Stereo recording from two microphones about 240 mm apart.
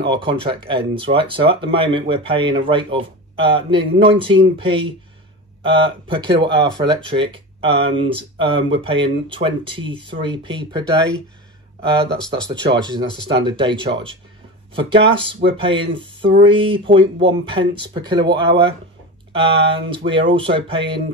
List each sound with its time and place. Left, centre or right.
0.0 s speech: centre
12.4 s speech: centre